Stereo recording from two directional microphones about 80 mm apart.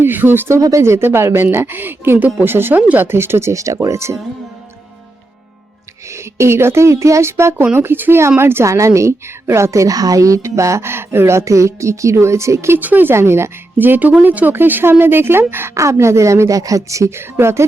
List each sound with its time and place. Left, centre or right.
0.0 s speech: right
0.6 s a woman's voice: right
6.1 s a woman's voice: right
12.8 s speech: right
15.7 s a woman's voice: right